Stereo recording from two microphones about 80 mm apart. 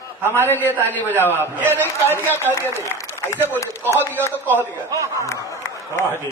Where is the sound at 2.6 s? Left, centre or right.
Left.